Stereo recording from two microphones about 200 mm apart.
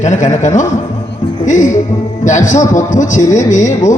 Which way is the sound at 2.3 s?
35° left (ahead or behind).